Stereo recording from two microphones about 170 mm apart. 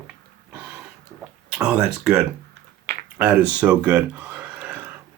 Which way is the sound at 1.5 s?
5° right (ahead or behind).